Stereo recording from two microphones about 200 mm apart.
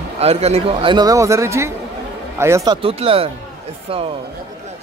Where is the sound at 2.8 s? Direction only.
30° right (ahead or behind).